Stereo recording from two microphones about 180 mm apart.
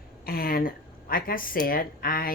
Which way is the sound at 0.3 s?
55° left (ahead or behind).